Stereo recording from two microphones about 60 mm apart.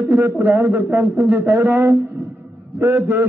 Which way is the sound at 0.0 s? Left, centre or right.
Right.